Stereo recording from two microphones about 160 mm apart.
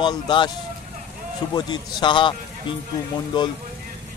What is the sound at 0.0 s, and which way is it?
Speech, 30° left (ahead or behind).